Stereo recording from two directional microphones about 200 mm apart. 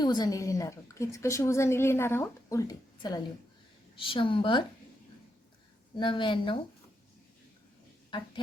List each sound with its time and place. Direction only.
0.0 s a woman's voice: 20° left (ahead or behind)
6.0 s a woman's voice: 25° left (ahead or behind)